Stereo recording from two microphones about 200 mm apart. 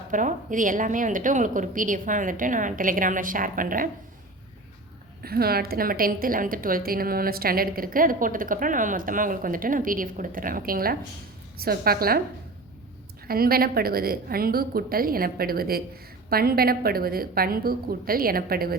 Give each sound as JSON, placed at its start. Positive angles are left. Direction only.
{"t": 0.1, "sound": "a woman's voice", "side_deg": -40}
{"t": 5.2, "sound": "a woman's voice", "side_deg": -50}
{"t": 13.2, "sound": "a woman's voice", "side_deg": -50}